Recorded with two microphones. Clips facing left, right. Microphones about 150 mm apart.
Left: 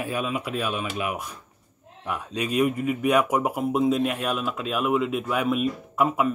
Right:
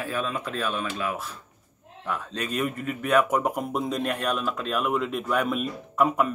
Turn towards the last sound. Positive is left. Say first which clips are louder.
# even
turn(degrees=5)  # may be behind; listen again after turning